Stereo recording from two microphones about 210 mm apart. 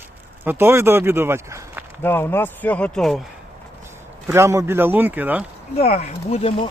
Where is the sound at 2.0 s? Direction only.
10° left (ahead or behind).